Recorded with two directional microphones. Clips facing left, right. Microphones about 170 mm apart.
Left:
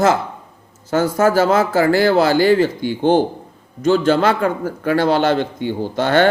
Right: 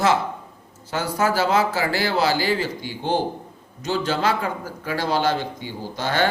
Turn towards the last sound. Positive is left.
turn(degrees=60)  # may be behind; listen again after turning